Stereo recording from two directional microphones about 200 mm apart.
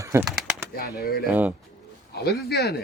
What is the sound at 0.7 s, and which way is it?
Speech, 50° left (ahead or behind).